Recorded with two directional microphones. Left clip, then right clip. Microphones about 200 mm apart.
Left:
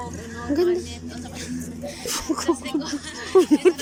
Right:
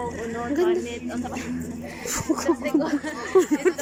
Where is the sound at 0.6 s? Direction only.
15° right (ahead or behind).